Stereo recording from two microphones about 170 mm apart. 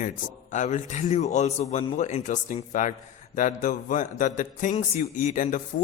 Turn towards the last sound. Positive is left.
turn(degrees=50)  # may be behind; listen again after turning